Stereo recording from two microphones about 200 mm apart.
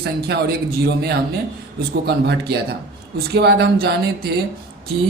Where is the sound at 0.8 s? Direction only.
55° right (ahead or behind).